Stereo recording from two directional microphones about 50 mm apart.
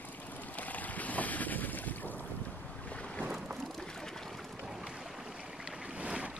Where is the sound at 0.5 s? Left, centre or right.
Left.